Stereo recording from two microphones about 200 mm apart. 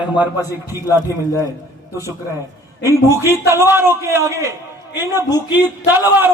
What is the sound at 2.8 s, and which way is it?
A man's voice, 15° right (ahead or behind).